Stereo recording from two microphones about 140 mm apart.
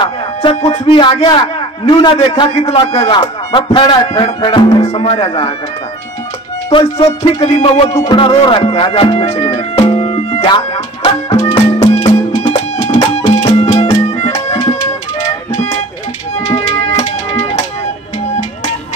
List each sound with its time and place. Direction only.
0.0 s music: 35° left (ahead or behind)
0.6 s a man's voice: 45° left (ahead or behind)
2.5 s music: 45° left (ahead or behind)
3.1 s a man's voice: 35° left (ahead or behind)
4.8 s music: 45° left (ahead or behind)
6.7 s a man's voice: 40° left (ahead or behind)
7.9 s speech: 20° left (ahead or behind)
8.2 s music: 40° left (ahead or behind)
11.5 s music: 45° left (ahead or behind)
16.5 s music: 50° left (ahead or behind)